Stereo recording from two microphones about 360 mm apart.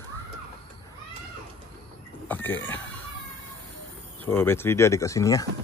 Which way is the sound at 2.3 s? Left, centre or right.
Centre.